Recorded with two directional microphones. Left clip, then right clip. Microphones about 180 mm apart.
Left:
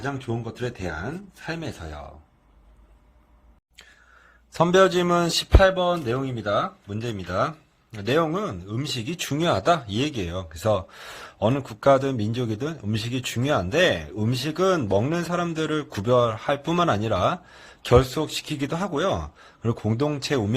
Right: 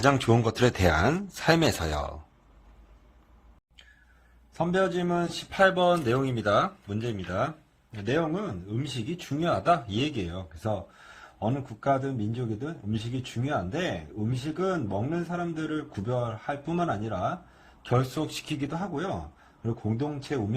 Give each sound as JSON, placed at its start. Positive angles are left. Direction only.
{"t": 0.0, "sound": "speech", "side_deg": -45}
{"t": 4.5, "sound": "a man's voice", "side_deg": 45}
{"t": 5.7, "sound": "speech", "side_deg": 0}
{"t": 7.0, "sound": "speech", "side_deg": 20}
{"t": 8.0, "sound": "a man's voice", "side_deg": 30}
{"t": 11.3, "sound": "a man's voice", "side_deg": 45}
{"t": 18.1, "sound": "speech", "side_deg": 20}
{"t": 18.7, "sound": "a man's voice", "side_deg": 40}